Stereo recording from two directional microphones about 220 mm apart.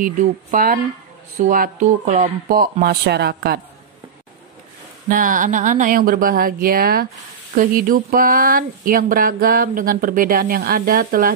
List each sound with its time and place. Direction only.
0.0 s speech: 40° right (ahead or behind)
5.0 s speech: 35° right (ahead or behind)